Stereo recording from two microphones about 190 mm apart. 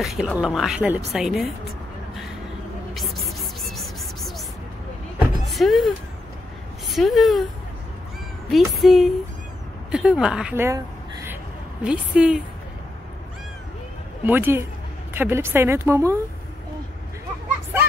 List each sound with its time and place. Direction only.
0.0 s a woman's voice: centre (ahead or behind)
2.9 s music: centre (ahead or behind)
5.5 s speech: centre (ahead or behind)
6.9 s speech: centre (ahead or behind)
8.5 s a woman's voice: centre (ahead or behind)
11.8 s a woman's voice: 5° right (ahead or behind)
14.2 s speech: 10° right (ahead or behind)